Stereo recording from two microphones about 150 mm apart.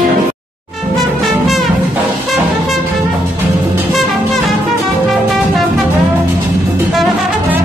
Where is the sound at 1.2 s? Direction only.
Centre (ahead or behind).